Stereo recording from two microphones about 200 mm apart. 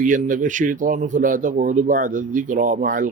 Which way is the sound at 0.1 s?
40° right (ahead or behind).